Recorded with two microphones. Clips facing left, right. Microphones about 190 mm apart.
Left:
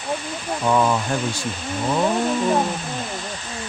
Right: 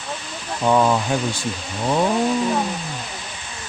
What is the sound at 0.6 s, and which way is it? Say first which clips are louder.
Speech: right 2 dB; 15° right (ahead or behind).